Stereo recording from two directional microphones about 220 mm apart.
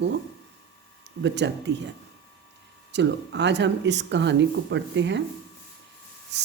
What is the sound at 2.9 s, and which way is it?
Speech, 50° right (ahead or behind).